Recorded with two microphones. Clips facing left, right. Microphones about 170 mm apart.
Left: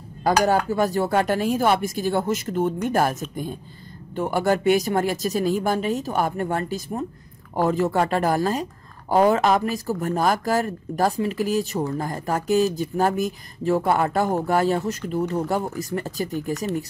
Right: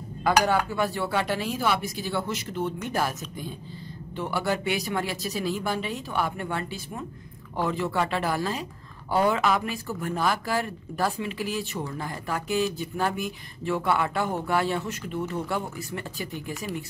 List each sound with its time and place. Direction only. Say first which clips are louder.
0.2 s speech: left 3 dB; 40° left (ahead or behind)